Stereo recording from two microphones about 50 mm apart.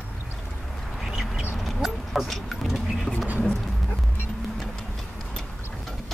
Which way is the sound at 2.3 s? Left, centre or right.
Centre.